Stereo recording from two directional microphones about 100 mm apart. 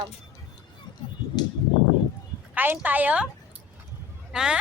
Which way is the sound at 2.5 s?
20° right (ahead or behind).